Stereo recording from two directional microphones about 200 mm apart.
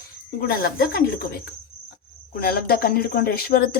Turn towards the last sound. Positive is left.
turn(degrees=50)  # may be behind; listen again after turning